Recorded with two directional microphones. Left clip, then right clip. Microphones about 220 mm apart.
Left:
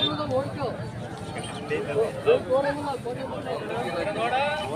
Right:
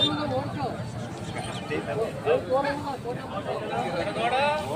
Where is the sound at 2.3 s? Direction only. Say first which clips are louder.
Left 3 dB; 30° left (ahead or behind).